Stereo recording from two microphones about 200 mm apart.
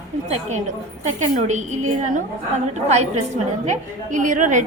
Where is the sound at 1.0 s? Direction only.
35° right (ahead or behind).